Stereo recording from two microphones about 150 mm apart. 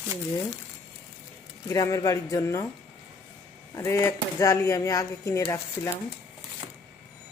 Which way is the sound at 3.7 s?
20° left (ahead or behind).